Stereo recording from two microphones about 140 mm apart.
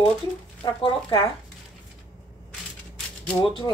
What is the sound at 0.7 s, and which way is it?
Speech, 40° left (ahead or behind).